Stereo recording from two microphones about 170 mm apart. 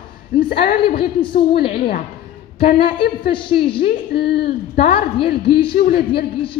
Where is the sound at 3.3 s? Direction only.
30° left (ahead or behind).